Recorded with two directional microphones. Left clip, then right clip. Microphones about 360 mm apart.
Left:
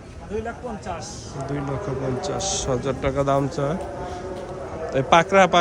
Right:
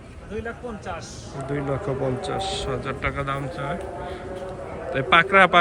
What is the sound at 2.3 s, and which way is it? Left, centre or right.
A man's voice, centre.